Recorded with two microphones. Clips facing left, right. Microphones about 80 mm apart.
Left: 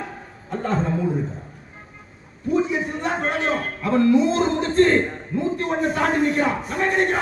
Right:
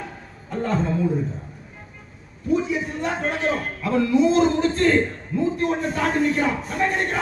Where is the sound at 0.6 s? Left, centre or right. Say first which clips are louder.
Even; left.